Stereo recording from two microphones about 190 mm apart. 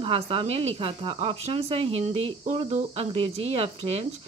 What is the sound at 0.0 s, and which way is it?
Speech, 30° right (ahead or behind).